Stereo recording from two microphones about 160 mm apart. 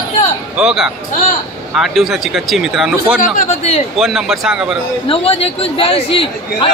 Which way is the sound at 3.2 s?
50° left (ahead or behind).